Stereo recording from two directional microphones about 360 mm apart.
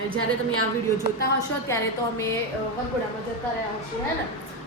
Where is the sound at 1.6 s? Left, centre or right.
Centre.